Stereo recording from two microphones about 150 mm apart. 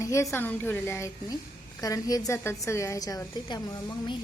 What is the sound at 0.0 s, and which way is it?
A woman's voice, 20° left (ahead or behind).